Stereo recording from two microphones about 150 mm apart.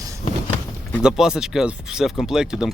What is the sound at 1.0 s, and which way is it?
Speech, 5° right (ahead or behind).